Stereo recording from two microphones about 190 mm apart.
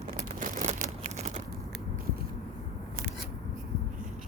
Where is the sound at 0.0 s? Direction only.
40° right (ahead or behind).